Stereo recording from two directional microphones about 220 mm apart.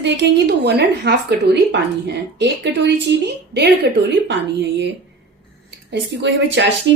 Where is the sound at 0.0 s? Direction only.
55° right (ahead or behind).